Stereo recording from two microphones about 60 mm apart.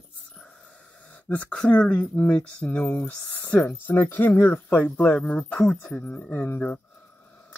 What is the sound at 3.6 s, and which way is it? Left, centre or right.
Speech, left.